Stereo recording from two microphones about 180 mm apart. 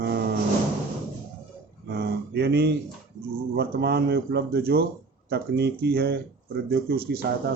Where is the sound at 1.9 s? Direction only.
60° right (ahead or behind).